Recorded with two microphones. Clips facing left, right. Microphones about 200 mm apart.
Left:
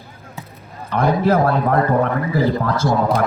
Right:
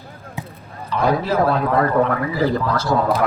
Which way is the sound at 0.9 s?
50° left (ahead or behind).